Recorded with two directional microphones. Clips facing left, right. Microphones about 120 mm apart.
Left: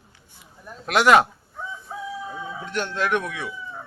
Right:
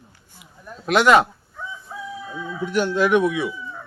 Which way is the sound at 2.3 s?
25° left (ahead or behind).